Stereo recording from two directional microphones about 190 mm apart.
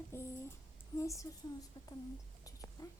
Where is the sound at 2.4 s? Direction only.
20° left (ahead or behind).